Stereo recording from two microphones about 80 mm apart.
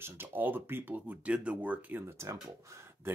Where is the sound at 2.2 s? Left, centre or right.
Right.